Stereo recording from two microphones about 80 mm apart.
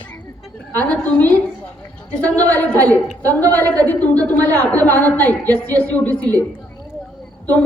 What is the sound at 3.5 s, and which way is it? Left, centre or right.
A woman's voice, left.